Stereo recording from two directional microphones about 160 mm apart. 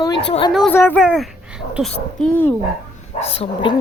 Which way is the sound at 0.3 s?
35° left (ahead or behind).